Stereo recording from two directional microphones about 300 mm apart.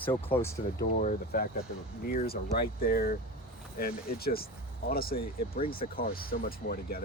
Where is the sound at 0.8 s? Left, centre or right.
Left.